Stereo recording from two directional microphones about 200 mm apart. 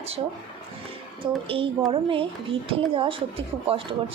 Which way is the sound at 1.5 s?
25° right (ahead or behind).